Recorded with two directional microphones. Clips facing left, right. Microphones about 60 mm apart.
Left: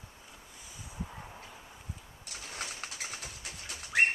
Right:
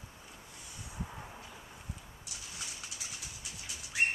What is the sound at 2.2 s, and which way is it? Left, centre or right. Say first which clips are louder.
Bird: left 9 dB; left.